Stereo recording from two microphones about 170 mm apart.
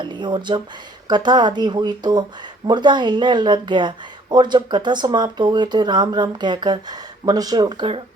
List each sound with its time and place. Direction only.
0.0 s speech: 25° right (ahead or behind)